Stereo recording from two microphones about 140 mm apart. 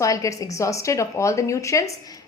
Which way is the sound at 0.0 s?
25° left (ahead or behind).